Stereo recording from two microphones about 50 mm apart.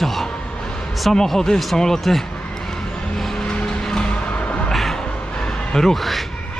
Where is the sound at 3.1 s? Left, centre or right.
Centre.